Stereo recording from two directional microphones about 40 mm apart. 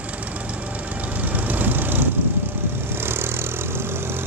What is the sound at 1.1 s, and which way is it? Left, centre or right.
Vehicle, right.